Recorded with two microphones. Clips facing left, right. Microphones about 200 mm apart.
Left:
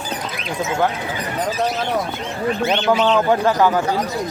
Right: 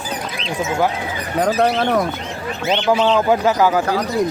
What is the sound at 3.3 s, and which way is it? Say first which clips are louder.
Speech: right 1 dB; 5° right (ahead or behind).